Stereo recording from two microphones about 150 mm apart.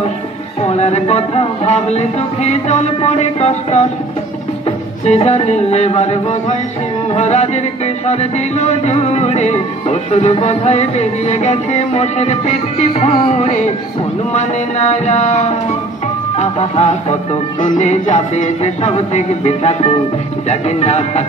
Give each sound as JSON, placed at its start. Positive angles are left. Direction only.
{"t": 0.6, "sound": "music", "side_deg": 45}